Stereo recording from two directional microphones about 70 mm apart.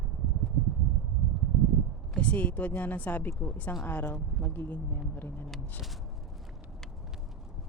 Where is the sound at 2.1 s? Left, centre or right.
Centre.